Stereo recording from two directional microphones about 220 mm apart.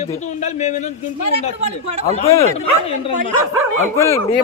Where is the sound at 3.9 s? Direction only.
15° left (ahead or behind).